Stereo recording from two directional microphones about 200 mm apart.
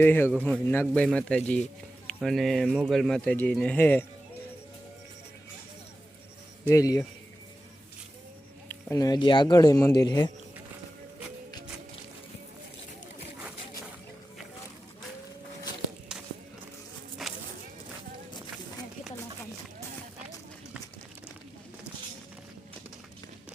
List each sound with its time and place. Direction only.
0.0 s speech: 10° left (ahead or behind)
6.7 s speech: 15° left (ahead or behind)
8.9 s speech: 20° left (ahead or behind)
17.2 s a sound: centre (ahead or behind)